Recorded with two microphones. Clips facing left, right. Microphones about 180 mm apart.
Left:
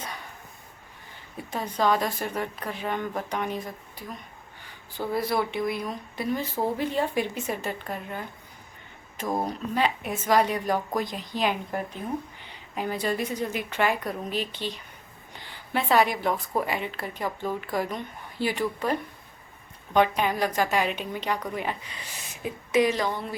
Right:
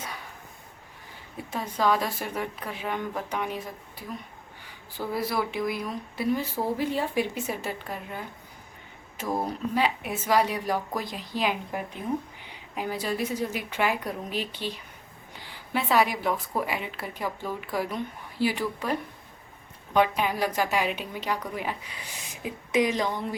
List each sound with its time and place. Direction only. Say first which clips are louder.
1.5 s a woman's voice: left 1 dB; 5° right (ahead or behind)
9.2 s a woman's voice: left 1 dB; 15° left (ahead or behind)
9.7 s a woman's voice: left 1 dB; 10° right (ahead or behind)